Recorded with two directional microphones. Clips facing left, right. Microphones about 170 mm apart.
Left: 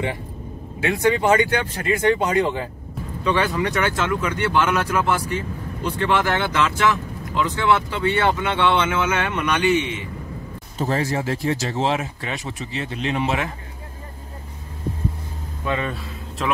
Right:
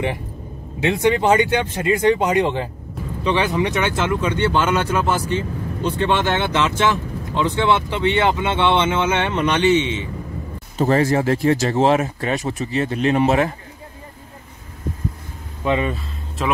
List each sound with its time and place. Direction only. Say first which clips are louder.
0.7 s speech: right 2 dB; 20° right (ahead or behind)
10.8 s speech: right 6 dB; 60° right (ahead or behind)
15.6 s speech: right 5 dB; 20° right (ahead or behind)